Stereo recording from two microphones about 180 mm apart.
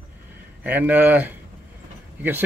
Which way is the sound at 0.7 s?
10° right (ahead or behind).